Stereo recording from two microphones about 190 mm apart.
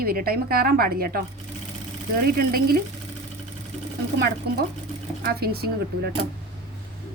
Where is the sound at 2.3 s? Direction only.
50° right (ahead or behind).